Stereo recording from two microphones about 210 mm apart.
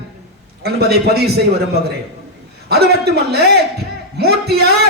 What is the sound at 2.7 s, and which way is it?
A man's voice, 50° right (ahead or behind).